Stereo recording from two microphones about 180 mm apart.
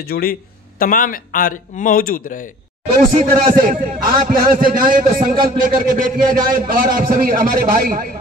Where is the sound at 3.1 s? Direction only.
50° right (ahead or behind).